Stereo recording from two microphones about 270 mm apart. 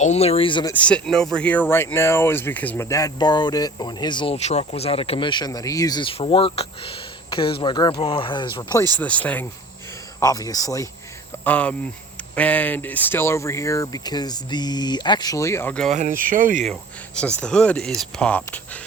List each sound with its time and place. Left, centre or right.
0.0 s speech: left
0.7 s speech: centre
9.0 s speech: centre
16.0 s speech: right
17.4 s speech: centre